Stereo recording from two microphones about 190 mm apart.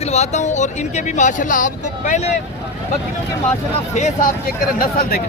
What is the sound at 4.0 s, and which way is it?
Speech, 40° left (ahead or behind).